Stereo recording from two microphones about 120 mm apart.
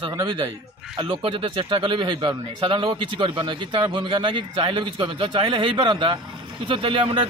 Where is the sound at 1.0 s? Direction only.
45° right (ahead or behind).